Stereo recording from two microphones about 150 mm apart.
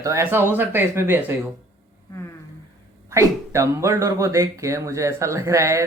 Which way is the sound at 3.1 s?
20° right (ahead or behind).